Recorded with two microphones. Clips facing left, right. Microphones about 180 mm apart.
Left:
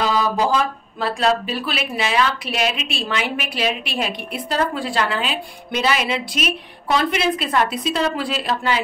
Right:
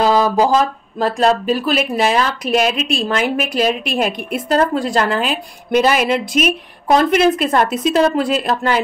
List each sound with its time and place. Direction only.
0.0 s speech: 40° right (ahead or behind)